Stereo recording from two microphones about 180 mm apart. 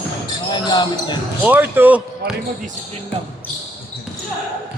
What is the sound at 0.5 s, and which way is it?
Speech, 25° left (ahead or behind).